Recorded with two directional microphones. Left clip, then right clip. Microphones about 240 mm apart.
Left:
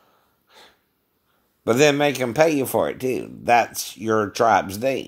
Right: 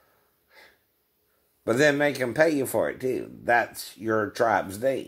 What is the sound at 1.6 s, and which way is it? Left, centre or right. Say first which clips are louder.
Speech: left 4 dB; left.